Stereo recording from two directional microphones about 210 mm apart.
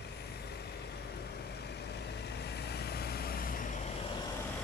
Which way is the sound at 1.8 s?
50° left (ahead or behind).